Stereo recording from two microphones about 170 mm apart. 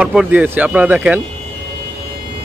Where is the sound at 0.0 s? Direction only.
5° right (ahead or behind).